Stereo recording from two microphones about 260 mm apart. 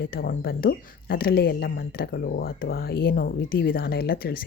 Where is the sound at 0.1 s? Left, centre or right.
Left.